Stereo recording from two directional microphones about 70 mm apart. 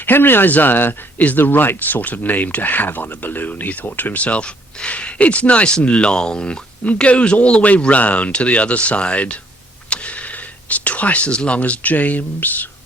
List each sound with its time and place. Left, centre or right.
0.0 s speech: left